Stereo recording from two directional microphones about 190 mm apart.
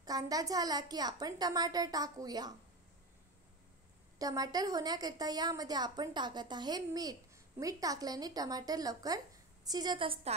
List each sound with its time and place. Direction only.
0.0 s a woman's voice: 20° right (ahead or behind)
4.2 s a woman's voice: 20° right (ahead or behind)